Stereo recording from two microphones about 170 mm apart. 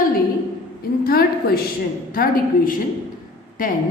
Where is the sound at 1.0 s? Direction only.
60° left (ahead or behind).